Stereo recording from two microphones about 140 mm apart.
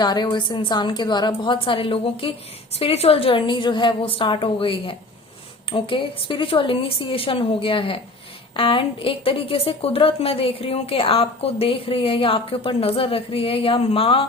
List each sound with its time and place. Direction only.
0.0 s a woman's voice: 30° left (ahead or behind)